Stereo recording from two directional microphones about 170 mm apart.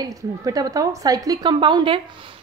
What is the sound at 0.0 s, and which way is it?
Speech, 20° right (ahead or behind).